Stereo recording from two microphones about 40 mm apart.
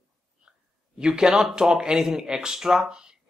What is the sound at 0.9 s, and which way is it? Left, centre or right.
A man's voice, right.